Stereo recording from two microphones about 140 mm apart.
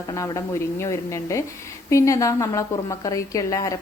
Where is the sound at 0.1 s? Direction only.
20° left (ahead or behind).